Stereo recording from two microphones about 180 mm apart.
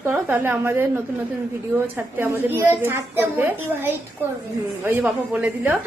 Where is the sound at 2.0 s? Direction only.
10° right (ahead or behind).